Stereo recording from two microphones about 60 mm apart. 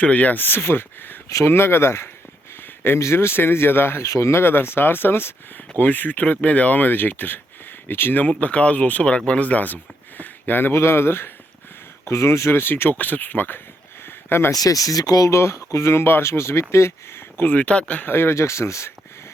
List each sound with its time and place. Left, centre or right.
0.0 s speech: left
2.6 s a sound: left
3.0 s speech: left
4.0 s speech: left
8.3 s speech: left
14.5 s speech: left
15.3 s speech: left
17.6 s speech: centre
18.0 s speech: left